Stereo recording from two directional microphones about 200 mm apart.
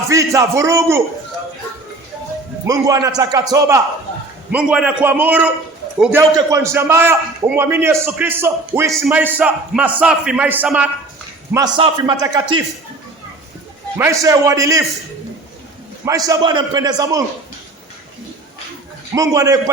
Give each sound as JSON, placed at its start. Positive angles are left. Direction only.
{"t": 0.1, "sound": "a man's voice", "side_deg": -15}
{"t": 2.6, "sound": "a man's voice", "side_deg": -15}
{"t": 4.5, "sound": "a man's voice", "side_deg": -5}
{"t": 11.5, "sound": "a man's voice", "side_deg": -20}
{"t": 14.0, "sound": "a man's voice", "side_deg": -15}
{"t": 16.0, "sound": "a man's voice", "side_deg": -15}
{"t": 19.1, "sound": "a man's voice", "side_deg": -15}